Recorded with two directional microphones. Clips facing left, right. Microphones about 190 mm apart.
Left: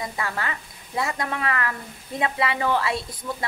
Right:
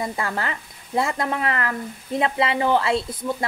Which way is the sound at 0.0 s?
30° right (ahead or behind).